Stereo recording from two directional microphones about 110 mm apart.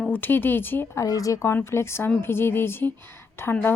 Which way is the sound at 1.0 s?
30° left (ahead or behind).